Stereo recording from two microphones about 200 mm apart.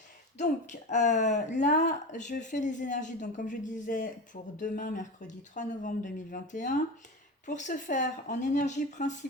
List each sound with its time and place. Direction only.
0.3 s a woman's voice: 35° left (ahead or behind)